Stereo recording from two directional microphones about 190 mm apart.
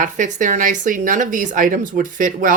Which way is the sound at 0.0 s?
40° right (ahead or behind).